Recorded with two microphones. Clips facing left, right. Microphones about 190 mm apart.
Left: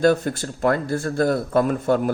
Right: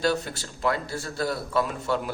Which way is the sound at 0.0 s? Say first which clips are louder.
Left 8 dB; 50° left (ahead or behind).